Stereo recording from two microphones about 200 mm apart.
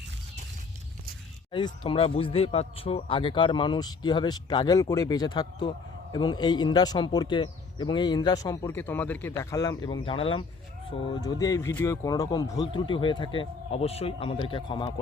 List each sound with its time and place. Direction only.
1.5 s speech: 25° left (ahead or behind)